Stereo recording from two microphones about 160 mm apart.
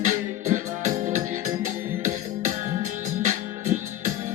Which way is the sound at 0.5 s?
50° right (ahead or behind).